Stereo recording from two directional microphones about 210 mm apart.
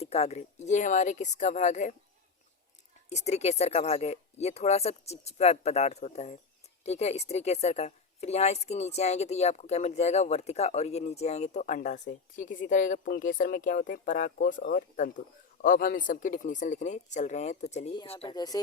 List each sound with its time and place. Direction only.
0.0 s a woman's voice: 30° left (ahead or behind)
3.1 s a woman's voice: 30° left (ahead or behind)